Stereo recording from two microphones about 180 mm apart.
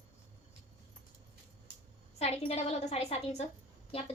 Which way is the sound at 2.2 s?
35° left (ahead or behind).